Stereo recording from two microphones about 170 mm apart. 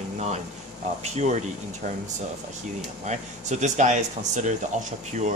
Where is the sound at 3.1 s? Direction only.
45° right (ahead or behind).